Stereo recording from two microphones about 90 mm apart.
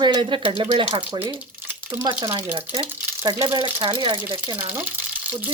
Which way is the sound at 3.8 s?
75° right (ahead or behind).